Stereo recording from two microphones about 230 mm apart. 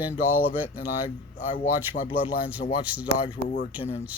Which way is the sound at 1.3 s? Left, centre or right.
Left.